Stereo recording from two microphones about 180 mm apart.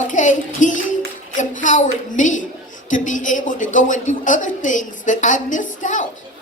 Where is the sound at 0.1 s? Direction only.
45° left (ahead or behind).